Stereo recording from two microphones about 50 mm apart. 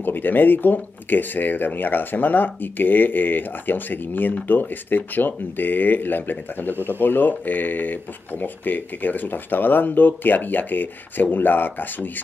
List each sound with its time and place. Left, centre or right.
0.0 s speech: left